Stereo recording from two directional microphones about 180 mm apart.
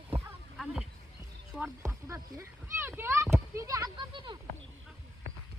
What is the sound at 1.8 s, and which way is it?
Speech, 15° right (ahead or behind).